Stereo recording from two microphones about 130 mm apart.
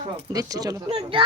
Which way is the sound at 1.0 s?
40° right (ahead or behind).